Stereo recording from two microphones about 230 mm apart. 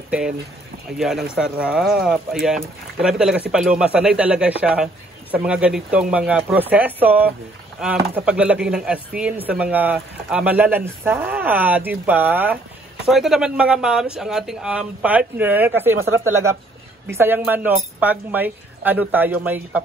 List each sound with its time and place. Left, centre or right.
0.9 s speech: centre
16.0 s speech: right
17.1 s speech: centre